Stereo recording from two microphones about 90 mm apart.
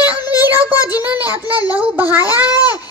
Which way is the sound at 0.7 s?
45° left (ahead or behind).